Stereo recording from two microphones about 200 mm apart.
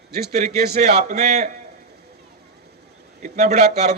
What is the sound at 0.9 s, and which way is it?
Speech, 35° right (ahead or behind).